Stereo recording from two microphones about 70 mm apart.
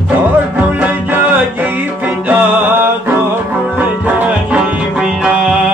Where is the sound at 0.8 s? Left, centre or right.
Right.